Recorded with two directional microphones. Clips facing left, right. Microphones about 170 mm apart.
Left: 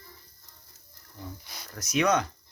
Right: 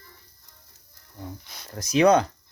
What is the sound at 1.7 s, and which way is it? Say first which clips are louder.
Speech: right 7 dB; 30° right (ahead or behind).